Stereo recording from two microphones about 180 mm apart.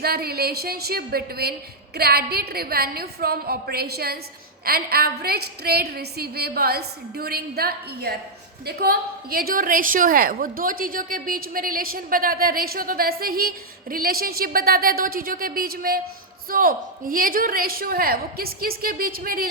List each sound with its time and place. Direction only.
0.0 s a woman's voice: 60° right (ahead or behind)